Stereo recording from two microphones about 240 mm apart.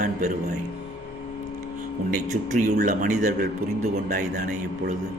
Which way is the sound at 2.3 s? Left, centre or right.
Right.